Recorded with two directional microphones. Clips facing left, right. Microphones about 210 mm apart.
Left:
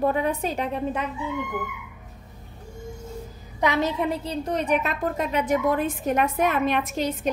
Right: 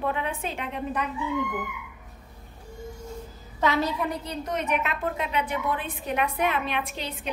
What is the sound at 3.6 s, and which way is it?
A woman's voice, 20° left (ahead or behind).